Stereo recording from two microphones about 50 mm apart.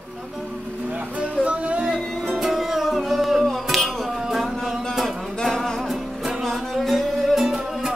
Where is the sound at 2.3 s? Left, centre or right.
Centre.